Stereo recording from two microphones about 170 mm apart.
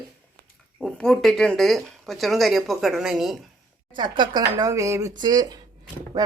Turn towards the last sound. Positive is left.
turn(degrees=-25)  # may be behind; listen again after turning